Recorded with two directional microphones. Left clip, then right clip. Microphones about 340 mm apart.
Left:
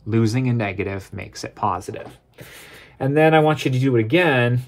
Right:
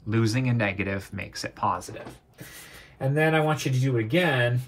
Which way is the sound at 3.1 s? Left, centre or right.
Left.